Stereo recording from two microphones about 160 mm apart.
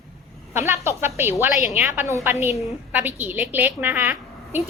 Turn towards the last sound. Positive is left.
turn(degrees=-10)  # may be behind; listen again after turning